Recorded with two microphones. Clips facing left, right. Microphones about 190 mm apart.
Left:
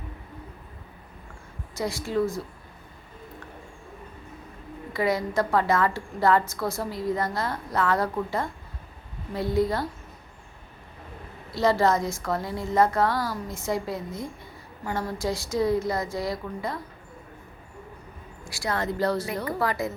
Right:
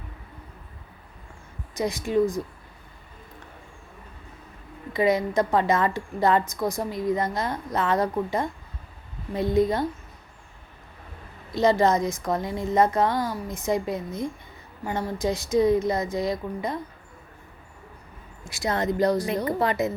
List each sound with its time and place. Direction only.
1.7 s speech: 20° right (ahead or behind)
4.9 s a woman's voice: 20° right (ahead or behind)
11.5 s a woman's voice: 20° right (ahead or behind)
18.4 s a woman's voice: 20° right (ahead or behind)